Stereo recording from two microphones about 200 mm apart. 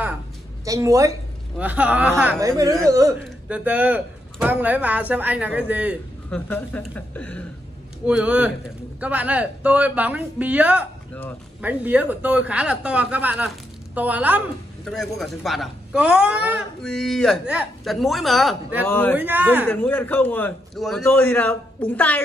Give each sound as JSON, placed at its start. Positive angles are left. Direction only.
{"t": 0.7, "sound": "speech", "side_deg": -15}
{"t": 2.4, "sound": "speech", "side_deg": -15}
{"t": 6.3, "sound": "a man's voice", "side_deg": 5}
{"t": 8.1, "sound": "speech", "side_deg": -5}
{"t": 18.9, "sound": "a man's voice", "side_deg": 10}
{"t": 19.1, "sound": "speech", "side_deg": -10}
{"t": 19.7, "sound": "a man's voice", "side_deg": 10}